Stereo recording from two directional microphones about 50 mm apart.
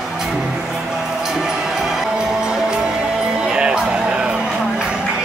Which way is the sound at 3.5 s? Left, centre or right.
Centre.